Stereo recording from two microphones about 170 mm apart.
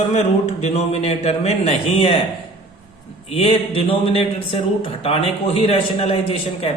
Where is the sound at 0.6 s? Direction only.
40° left (ahead or behind).